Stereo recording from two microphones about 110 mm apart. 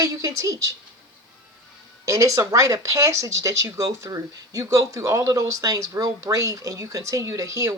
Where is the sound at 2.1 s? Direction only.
30° right (ahead or behind).